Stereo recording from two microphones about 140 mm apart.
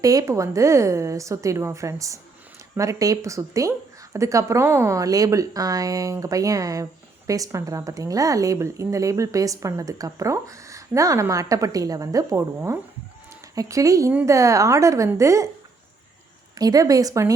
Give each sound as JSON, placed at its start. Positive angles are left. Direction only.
{"t": 0.0, "sound": "speech", "side_deg": -25}
{"t": 16.6, "sound": "speech", "side_deg": -25}